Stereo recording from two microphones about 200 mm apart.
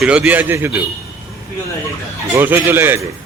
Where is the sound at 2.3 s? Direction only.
10° right (ahead or behind).